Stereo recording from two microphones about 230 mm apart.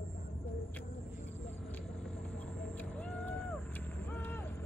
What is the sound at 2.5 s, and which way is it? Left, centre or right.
Vehicle, centre.